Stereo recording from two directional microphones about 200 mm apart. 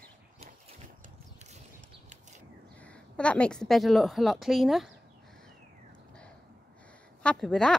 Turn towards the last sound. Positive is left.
turn(degrees=5)  # may be behind; listen again after turning